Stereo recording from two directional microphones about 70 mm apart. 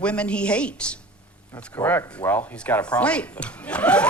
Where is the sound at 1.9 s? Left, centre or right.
Left.